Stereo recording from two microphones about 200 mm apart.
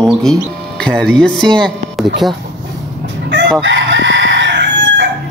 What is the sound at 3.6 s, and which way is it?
Crowing, 65° right (ahead or behind).